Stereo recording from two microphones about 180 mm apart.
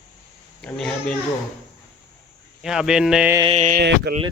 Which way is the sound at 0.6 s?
5° left (ahead or behind).